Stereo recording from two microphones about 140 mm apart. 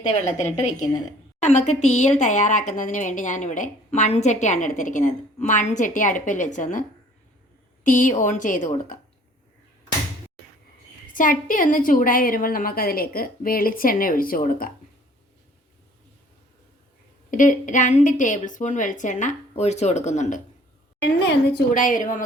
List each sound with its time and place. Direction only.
0.3 s speech: 60° left (ahead or behind)
7.9 s speech: 65° left (ahead or behind)
11.1 s a woman's voice: 75° left (ahead or behind)
17.3 s speech: 65° left (ahead or behind)
21.7 s a woman's voice: 70° left (ahead or behind)